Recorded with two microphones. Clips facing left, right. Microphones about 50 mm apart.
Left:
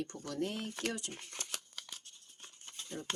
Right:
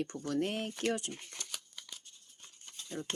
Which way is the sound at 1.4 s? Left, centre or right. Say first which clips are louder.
Left 1 dB; left.